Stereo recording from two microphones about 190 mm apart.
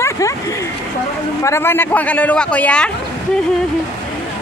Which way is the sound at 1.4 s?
15° left (ahead or behind).